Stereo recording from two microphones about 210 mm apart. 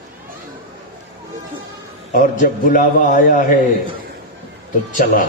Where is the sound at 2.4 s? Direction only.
40° left (ahead or behind).